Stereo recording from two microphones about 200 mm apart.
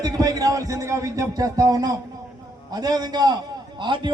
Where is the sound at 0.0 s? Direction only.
20° right (ahead or behind).